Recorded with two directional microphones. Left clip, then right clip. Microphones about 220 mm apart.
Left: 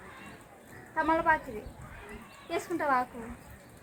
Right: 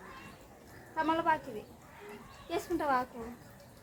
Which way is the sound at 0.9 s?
15° right (ahead or behind).